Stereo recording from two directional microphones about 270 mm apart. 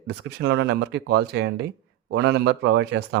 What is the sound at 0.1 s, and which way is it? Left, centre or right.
Speech, right.